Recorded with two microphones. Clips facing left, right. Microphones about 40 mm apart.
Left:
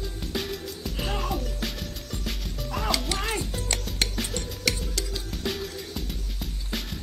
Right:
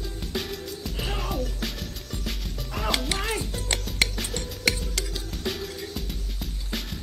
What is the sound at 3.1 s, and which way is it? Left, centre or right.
Music, centre.